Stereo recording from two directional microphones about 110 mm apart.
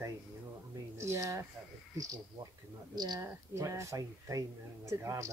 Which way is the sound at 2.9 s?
40° right (ahead or behind).